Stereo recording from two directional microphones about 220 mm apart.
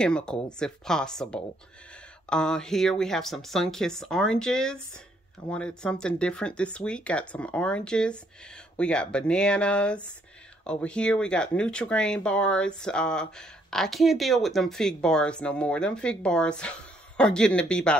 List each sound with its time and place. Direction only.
0.0 s speech: 5° left (ahead or behind)